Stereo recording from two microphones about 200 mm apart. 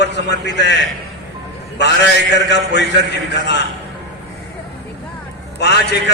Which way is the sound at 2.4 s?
60° left (ahead or behind).